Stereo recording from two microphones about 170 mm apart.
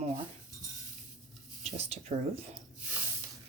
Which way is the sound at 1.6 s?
40° right (ahead or behind).